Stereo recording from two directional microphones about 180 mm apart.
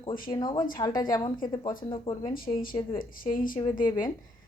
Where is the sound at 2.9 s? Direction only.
50° left (ahead or behind).